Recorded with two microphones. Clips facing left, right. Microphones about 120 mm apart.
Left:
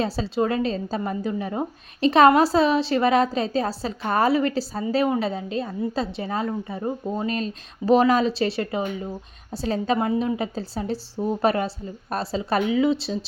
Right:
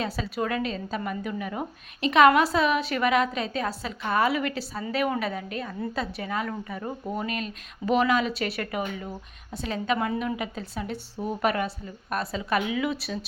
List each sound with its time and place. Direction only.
0.0 s a woman's voice: 30° left (ahead or behind)